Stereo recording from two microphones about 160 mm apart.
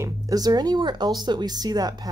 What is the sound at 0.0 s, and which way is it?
Speech, 20° right (ahead or behind).